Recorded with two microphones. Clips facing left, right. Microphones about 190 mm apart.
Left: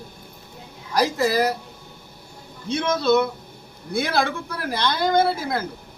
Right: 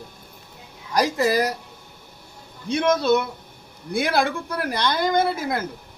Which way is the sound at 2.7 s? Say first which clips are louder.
Right 1 dB; 15° right (ahead or behind).